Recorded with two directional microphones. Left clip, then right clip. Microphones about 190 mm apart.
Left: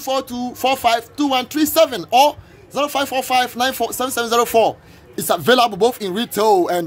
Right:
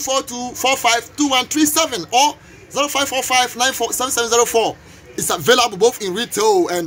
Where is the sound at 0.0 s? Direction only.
45° left (ahead or behind).